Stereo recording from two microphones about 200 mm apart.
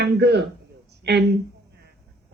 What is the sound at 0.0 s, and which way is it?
Speech, 55° right (ahead or behind).